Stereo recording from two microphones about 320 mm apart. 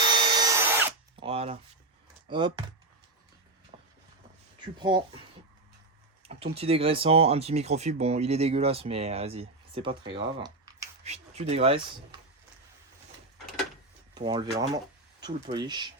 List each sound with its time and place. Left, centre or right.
0.1 s drill: centre
2.3 s speech: centre
4.6 s speech: centre
6.2 s speech: centre
14.2 s speech: centre